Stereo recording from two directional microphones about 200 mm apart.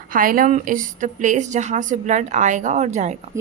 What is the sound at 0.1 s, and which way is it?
A woman's voice, 45° right (ahead or behind).